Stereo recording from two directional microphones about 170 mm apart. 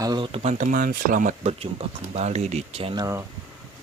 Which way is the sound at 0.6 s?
55° right (ahead or behind).